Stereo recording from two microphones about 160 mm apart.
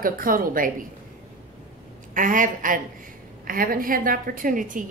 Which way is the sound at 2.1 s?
55° right (ahead or behind).